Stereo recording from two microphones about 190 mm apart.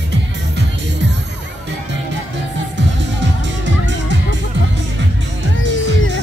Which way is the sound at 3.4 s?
70° right (ahead or behind).